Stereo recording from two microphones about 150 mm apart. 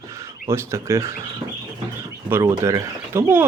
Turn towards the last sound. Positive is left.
turn(degrees=-15)  # may be behind; listen again after turning